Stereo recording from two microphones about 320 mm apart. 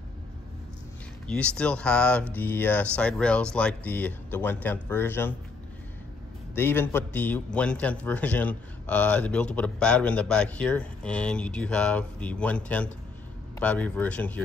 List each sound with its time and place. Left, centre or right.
1.2 s a man's voice: centre
6.5 s a man's voice: centre